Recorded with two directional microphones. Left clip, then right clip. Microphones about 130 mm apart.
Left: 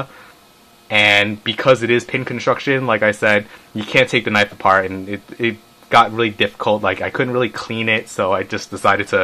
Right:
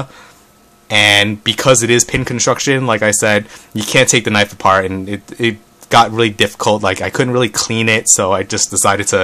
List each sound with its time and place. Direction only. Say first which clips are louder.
0.8 s speech: right 3 dB; 40° right (ahead or behind)